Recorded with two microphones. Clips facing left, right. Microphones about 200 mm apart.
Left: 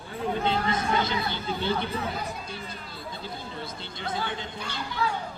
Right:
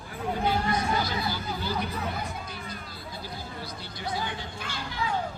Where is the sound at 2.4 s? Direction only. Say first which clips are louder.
Left 1 dB; 25° left (ahead or behind).